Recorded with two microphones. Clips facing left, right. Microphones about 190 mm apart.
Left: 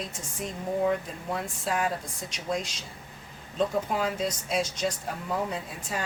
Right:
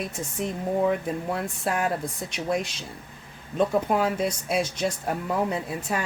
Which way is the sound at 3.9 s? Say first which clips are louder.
Right 4 dB; 60° right (ahead or behind).